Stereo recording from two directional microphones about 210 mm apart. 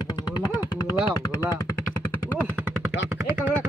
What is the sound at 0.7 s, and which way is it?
Gunshot, 20° left (ahead or behind).